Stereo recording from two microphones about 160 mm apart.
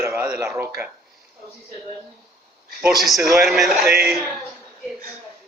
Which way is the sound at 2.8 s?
Centre (ahead or behind).